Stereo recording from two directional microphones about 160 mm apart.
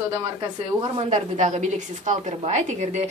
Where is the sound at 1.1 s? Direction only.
50° right (ahead or behind).